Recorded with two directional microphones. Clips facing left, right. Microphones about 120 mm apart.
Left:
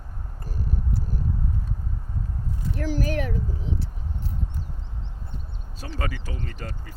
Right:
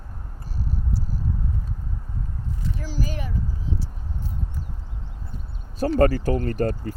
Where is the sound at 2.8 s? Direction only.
60° left (ahead or behind).